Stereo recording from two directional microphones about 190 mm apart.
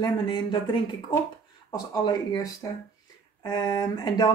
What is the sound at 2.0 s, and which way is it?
Speech, 20° left (ahead or behind).